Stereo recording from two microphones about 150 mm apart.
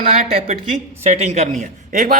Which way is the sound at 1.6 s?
60° right (ahead or behind).